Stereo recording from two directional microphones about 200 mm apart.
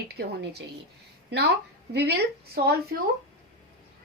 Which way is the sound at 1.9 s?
55° right (ahead or behind).